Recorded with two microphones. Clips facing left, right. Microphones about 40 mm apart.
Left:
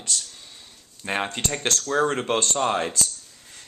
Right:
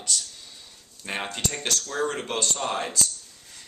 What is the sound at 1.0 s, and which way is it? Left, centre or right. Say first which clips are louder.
Speech: left 4 dB; centre.